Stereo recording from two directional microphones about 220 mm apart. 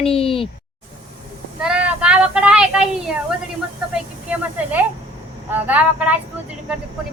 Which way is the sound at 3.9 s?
5° right (ahead or behind).